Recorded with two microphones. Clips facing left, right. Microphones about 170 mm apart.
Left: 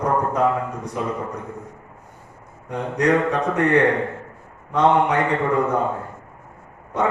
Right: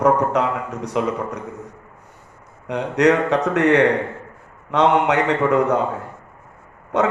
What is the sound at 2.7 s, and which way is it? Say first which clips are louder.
A man's voice: right 3 dB; 75° right (ahead or behind).